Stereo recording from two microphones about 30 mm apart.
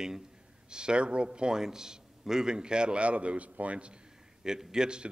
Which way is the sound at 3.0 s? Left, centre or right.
Right.